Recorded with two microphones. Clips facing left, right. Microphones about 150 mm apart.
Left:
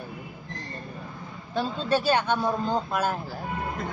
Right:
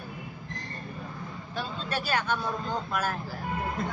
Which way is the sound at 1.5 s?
30° left (ahead or behind).